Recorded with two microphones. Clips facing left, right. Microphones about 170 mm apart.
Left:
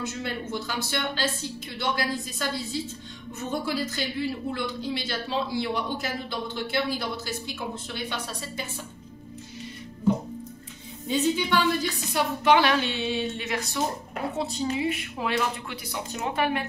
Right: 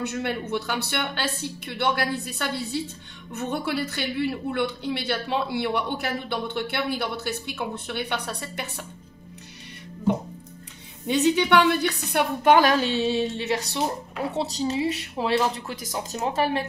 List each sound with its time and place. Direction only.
0.0 s a woman's voice: 60° right (ahead or behind)
11.1 s a woman's voice: 70° right (ahead or behind)
12.5 s a woman's voice: 40° right (ahead or behind)